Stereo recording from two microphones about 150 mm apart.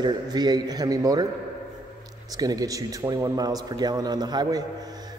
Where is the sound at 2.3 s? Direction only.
25° right (ahead or behind).